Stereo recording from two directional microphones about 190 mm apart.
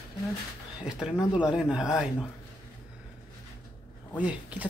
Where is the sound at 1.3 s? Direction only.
5° right (ahead or behind).